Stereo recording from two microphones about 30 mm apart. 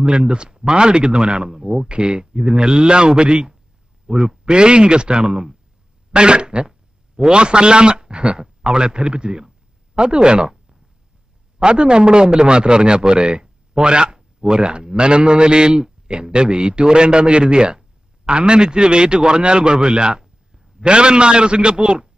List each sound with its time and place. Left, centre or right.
0.0 s a man's voice: right
4.1 s speech: right
4.5 s a man's voice: right
11.6 s a man's voice: right